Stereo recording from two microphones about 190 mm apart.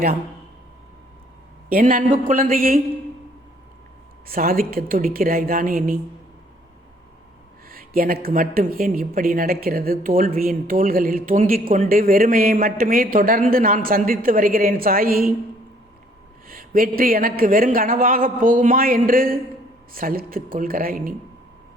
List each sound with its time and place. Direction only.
1.7 s speech: 45° right (ahead or behind)
4.3 s speech: 50° right (ahead or behind)
7.7 s speech: 50° right (ahead or behind)
16.5 s speech: 50° right (ahead or behind)